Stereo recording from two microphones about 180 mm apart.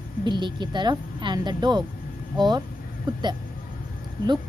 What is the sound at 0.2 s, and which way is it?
Speech, 25° right (ahead or behind).